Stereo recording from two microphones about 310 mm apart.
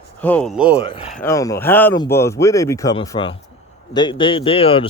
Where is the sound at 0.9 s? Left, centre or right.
Centre.